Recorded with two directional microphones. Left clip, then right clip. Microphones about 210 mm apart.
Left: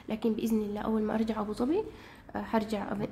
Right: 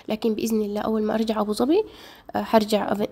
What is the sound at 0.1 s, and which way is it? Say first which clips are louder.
A woman's voice: right 7 dB; 40° right (ahead or behind).